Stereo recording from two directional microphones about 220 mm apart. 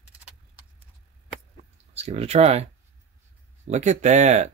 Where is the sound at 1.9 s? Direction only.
30° right (ahead or behind).